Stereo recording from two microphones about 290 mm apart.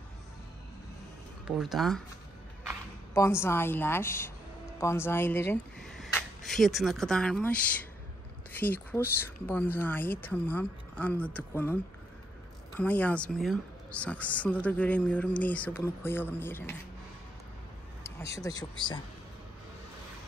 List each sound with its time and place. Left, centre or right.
1.4 s speech: centre
3.2 s speech: centre
18.2 s speech: centre